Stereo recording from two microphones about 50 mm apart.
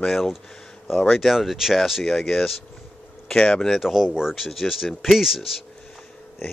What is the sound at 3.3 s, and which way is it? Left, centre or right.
Speech, left.